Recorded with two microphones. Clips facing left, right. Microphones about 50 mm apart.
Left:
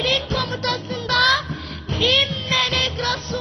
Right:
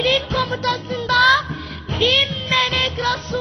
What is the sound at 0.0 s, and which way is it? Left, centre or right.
Music, right.